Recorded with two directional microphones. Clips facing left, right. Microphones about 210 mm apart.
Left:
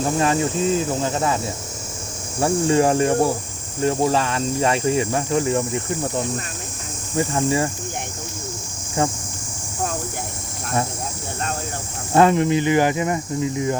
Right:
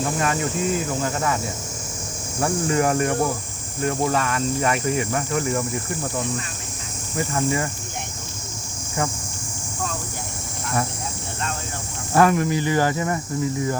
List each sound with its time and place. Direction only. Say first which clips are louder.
0.0 s speech: left 4 dB; 30° left (ahead or behind)
2.4 s speech: left 4 dB; 30° left (ahead or behind)
7.2 s speech: left 3 dB; 25° left (ahead or behind)
12.1 s speech: left 3 dB; 25° left (ahead or behind)